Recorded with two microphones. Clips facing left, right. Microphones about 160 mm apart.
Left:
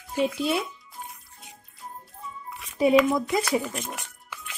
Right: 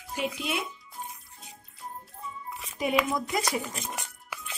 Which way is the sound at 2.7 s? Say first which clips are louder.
Left 8 dB; 30° left (ahead or behind).